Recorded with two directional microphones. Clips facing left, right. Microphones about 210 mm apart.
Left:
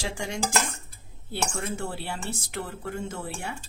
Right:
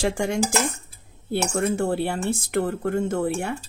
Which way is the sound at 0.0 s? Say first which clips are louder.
Right 9 dB; 55° right (ahead or behind).